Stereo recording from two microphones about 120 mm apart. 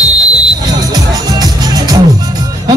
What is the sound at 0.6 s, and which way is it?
Music, 30° right (ahead or behind).